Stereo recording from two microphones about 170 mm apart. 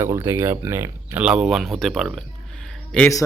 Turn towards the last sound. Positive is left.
turn(degrees=5)  # may be behind; listen again after turning